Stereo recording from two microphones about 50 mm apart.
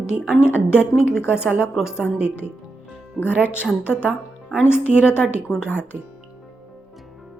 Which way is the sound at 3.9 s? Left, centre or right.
Left.